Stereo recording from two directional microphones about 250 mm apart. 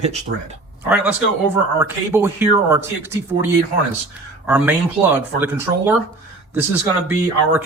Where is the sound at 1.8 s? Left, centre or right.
Centre.